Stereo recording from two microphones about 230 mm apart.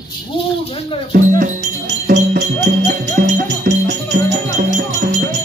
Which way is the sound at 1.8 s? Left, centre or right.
Right.